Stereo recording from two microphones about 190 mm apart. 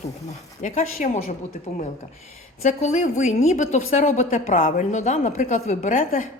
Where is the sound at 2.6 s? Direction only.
40° left (ahead or behind).